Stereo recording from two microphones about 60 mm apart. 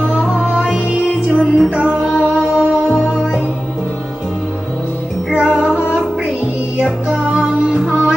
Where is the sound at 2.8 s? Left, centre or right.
Centre.